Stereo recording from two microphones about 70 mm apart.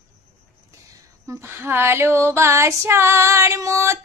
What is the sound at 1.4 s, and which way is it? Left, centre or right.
A woman's voice, right.